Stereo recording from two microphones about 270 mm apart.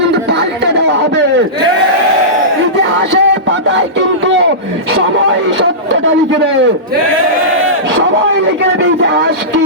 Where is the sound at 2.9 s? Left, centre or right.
Right.